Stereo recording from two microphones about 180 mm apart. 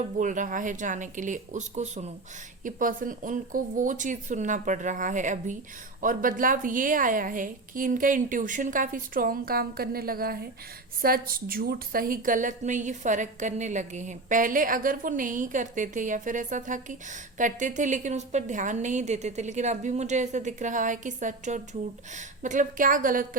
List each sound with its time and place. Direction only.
0.0 s a woman's voice: 45° right (ahead or behind)